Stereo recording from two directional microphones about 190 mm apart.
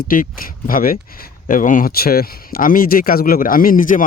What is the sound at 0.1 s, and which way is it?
Speech, 50° left (ahead or behind).